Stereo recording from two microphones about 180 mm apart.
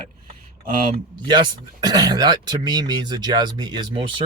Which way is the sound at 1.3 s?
25° right (ahead or behind).